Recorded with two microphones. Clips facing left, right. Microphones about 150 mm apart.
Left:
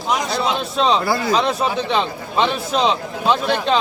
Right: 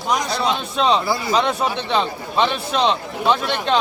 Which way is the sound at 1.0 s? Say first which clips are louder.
Left 2 dB; 60° left (ahead or behind).